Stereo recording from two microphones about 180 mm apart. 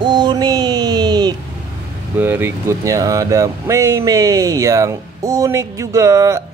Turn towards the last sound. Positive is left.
turn(degrees=-15)  # may be behind; listen again after turning